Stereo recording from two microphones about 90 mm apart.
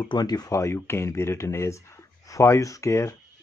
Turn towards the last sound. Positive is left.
turn(degrees=35)  # may be behind; listen again after turning